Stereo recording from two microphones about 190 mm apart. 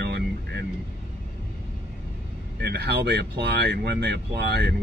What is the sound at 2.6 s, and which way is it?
Speech, 60° right (ahead or behind).